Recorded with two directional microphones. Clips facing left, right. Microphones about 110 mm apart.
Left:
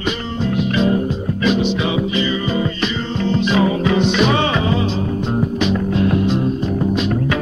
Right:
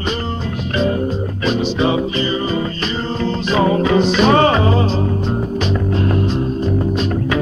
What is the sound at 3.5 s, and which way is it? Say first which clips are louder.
Music: right 4 dB; 40° right (ahead or behind).